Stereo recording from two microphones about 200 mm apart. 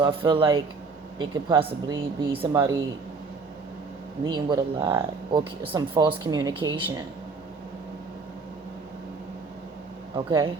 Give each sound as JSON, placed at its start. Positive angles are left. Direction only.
{"t": 0.0, "sound": "speech", "side_deg": -25}
{"t": 4.2, "sound": "speech", "side_deg": -20}
{"t": 10.2, "sound": "speech", "side_deg": -20}